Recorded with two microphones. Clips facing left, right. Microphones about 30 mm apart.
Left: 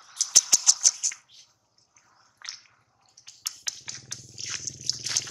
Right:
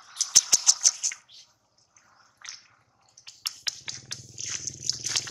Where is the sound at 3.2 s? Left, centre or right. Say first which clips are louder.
Right 3 dB; right.